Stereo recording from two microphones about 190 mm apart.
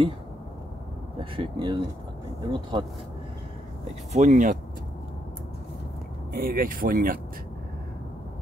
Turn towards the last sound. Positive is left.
turn(degrees=-50)  # may be behind; listen again after turning